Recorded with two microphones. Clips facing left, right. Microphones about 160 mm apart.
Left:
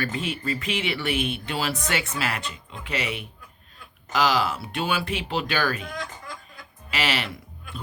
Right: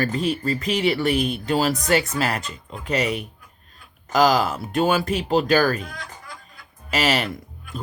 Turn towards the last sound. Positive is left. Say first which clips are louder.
# right 5 dB
turn(degrees=-40)  # may be behind; listen again after turning